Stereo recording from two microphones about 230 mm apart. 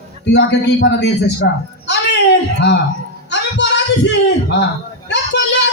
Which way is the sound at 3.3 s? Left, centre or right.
Left.